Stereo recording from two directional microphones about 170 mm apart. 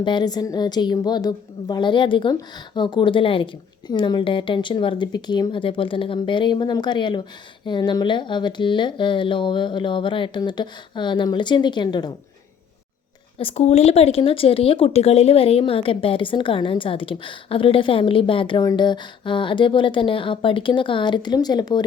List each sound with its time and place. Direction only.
0.0 s speech: 25° left (ahead or behind)
13.4 s speech: 40° left (ahead or behind)